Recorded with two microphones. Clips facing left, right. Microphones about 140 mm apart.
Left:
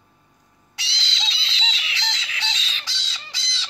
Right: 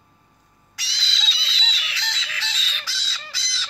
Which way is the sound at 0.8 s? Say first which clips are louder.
Left 2 dB; 25° left (ahead or behind).